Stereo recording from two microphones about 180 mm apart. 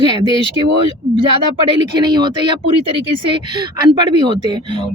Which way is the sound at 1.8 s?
25° right (ahead or behind).